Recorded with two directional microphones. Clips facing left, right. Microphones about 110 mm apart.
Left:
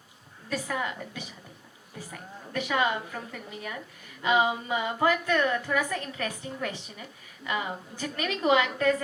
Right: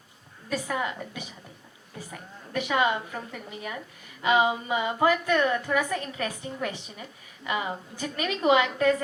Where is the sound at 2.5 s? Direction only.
20° right (ahead or behind).